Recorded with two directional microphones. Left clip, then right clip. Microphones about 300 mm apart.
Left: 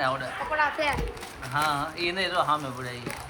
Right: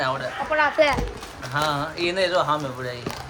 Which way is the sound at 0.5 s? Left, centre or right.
Right.